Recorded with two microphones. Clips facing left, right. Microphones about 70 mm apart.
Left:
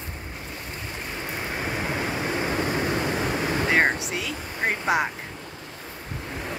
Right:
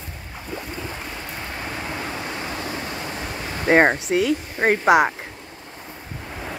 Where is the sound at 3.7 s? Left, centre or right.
Right.